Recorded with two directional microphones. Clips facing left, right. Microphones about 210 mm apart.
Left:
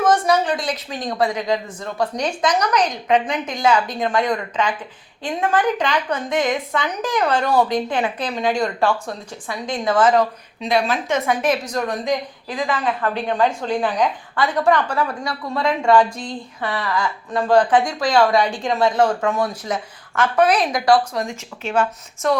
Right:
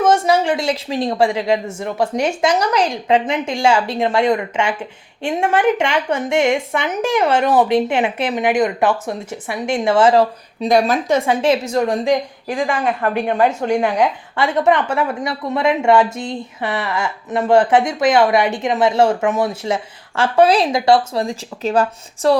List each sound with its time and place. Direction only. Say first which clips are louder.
0.0 s a woman's voice: right 2 dB; 25° right (ahead or behind)
10.7 s a woman's voice: right 5 dB; 40° right (ahead or behind)
11.3 s a woman's voice: right 4 dB; 25° right (ahead or behind)
12.5 s speech: right 3 dB; 45° right (ahead or behind)
13.8 s a woman's voice: right 3 dB; 25° right (ahead or behind)